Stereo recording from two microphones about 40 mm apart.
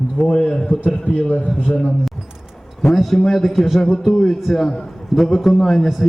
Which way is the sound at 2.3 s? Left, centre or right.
Centre.